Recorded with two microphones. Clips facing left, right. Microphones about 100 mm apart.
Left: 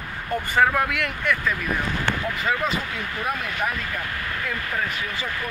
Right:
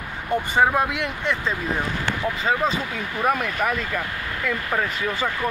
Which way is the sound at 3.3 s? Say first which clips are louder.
Right 5 dB; 65° right (ahead or behind).